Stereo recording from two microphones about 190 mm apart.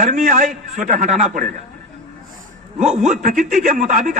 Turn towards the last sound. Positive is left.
turn(degrees=-40)  # may be behind; listen again after turning